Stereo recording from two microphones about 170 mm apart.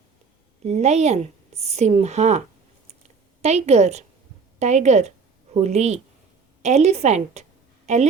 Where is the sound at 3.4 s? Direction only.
40° right (ahead or behind).